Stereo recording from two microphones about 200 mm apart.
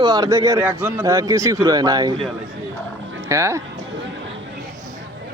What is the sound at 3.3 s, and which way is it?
Speech, 15° right (ahead or behind).